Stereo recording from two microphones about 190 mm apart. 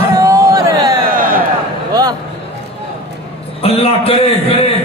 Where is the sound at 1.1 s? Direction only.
45° right (ahead or behind).